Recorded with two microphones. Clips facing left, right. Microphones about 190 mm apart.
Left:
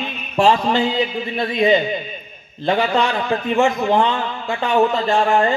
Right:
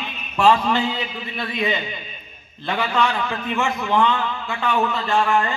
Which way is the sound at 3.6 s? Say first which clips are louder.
Left 4 dB; 50° left (ahead or behind).